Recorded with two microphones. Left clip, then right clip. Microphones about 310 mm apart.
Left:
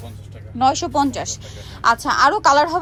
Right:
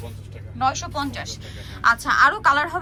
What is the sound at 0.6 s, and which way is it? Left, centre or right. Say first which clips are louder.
A woman's voice: left 6 dB; left.